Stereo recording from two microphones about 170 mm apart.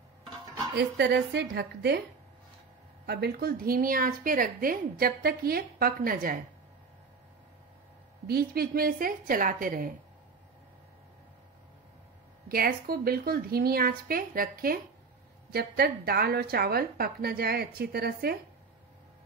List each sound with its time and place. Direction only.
0.7 s a woman's voice: 75° right (ahead or behind)
3.1 s a woman's voice: 70° right (ahead or behind)
8.3 s a woman's voice: 65° right (ahead or behind)
12.4 s a woman's voice: 60° right (ahead or behind)